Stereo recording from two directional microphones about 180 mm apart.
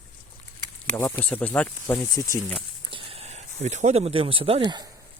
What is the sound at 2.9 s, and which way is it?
Speech, 30° right (ahead or behind).